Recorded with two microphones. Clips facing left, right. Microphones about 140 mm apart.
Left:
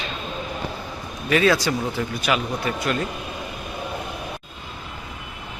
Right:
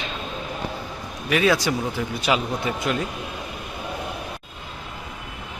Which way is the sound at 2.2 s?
25° right (ahead or behind).